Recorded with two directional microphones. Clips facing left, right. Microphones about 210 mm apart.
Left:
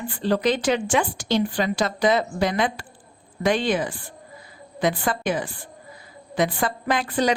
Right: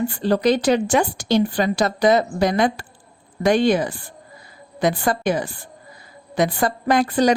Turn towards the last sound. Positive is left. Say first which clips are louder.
# right 5 dB
turn(degrees=-40)  # may be behind; listen again after turning